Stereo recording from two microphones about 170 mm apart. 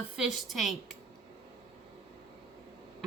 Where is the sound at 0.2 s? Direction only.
Centre (ahead or behind).